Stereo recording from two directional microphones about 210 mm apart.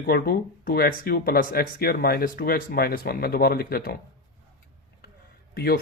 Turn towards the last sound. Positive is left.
turn(degrees=45)  # may be behind; listen again after turning